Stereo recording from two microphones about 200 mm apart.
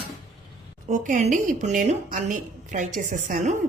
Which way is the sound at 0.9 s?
40° right (ahead or behind).